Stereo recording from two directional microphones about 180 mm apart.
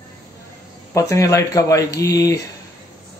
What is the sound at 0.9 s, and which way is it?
Speech, 15° left (ahead or behind).